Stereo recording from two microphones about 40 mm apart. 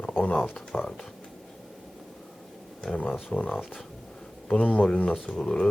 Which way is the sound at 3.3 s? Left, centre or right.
Left.